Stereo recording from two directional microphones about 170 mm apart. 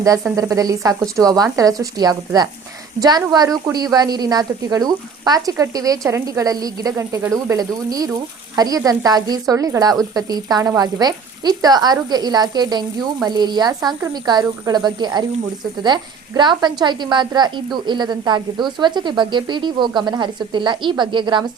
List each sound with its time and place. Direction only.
0.3 s a woman's voice: 20° right (ahead or behind)